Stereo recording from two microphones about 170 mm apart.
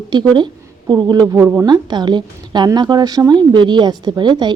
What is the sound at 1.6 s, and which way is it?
Speech, 25° right (ahead or behind).